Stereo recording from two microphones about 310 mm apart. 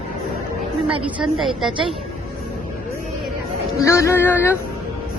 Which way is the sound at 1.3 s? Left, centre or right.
Centre.